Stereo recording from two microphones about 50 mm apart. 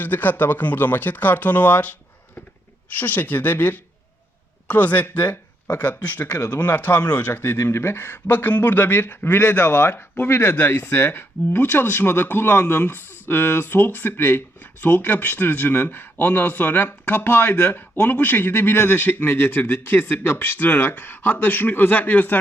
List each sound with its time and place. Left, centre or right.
0.0 s speech: left
7.5 s speech: left